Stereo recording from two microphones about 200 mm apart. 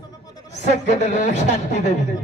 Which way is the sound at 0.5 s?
35° left (ahead or behind).